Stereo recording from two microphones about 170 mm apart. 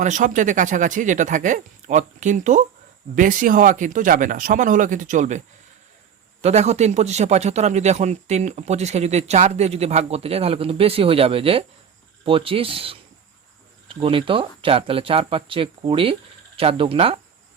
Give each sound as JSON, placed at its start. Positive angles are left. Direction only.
{"t": 0.0, "sound": "speech", "side_deg": -45}
{"t": 6.4, "sound": "a man's voice", "side_deg": -40}